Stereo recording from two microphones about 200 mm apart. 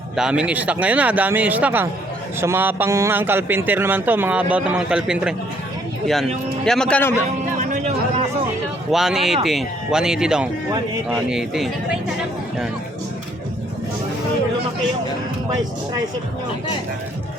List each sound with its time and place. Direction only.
0.2 s a man's voice: 5° right (ahead or behind)
6.7 s speech: 5° left (ahead or behind)
7.6 s a sound: 40° right (ahead or behind)
8.9 s speech: centre (ahead or behind)